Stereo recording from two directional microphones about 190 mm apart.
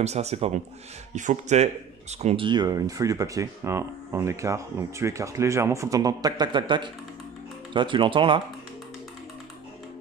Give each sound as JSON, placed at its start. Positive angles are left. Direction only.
{"t": 0.0, "sound": "a man's voice", "side_deg": -35}